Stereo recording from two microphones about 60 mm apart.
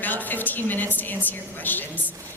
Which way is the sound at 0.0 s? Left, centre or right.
Left.